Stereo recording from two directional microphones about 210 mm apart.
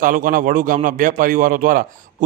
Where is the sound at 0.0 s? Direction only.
40° right (ahead or behind).